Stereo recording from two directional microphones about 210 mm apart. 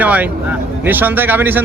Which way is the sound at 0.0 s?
5° right (ahead or behind).